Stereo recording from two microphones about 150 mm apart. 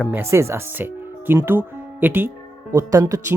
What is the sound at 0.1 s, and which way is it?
Speech, 15° right (ahead or behind).